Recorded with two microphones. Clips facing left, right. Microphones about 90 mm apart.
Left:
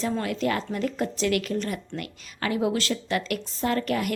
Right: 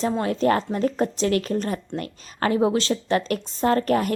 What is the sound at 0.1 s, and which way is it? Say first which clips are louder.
A woman's voice: right 5 dB; 30° right (ahead or behind).